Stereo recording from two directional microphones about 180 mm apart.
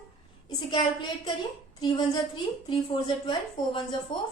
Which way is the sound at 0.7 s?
25° left (ahead or behind).